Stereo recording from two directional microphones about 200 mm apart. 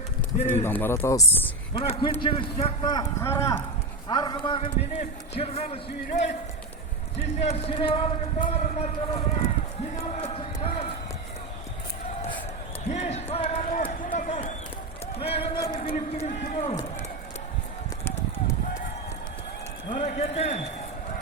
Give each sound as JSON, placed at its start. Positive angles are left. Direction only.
{"t": 0.6, "sound": "speech", "side_deg": 10}
{"t": 1.7, "sound": "a man's voice", "side_deg": 25}
{"t": 7.3, "sound": "a man's voice", "side_deg": 30}
{"t": 12.9, "sound": "run", "side_deg": 35}
{"t": 15.2, "sound": "a man's voice", "side_deg": 30}
{"t": 18.0, "sound": "a sound", "side_deg": 10}
{"t": 20.0, "sound": "a man's voice", "side_deg": 35}